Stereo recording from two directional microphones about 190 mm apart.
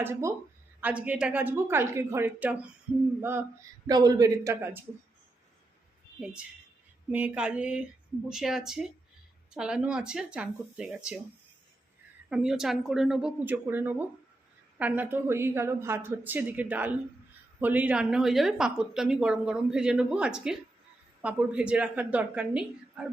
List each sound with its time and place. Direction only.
0.0 s a woman's voice: 15° right (ahead or behind)
6.1 s a woman's voice: 5° right (ahead or behind)
12.3 s a woman's voice: 5° right (ahead or behind)